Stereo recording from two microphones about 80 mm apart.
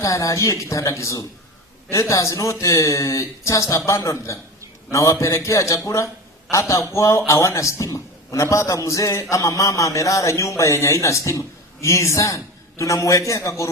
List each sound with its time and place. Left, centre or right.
0.0 s speech: left